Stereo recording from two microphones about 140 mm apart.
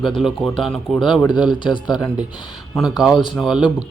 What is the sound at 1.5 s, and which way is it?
Speech, 35° left (ahead or behind).